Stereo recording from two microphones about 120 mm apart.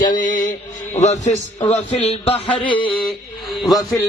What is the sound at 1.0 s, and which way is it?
Mantra, 75° left (ahead or behind).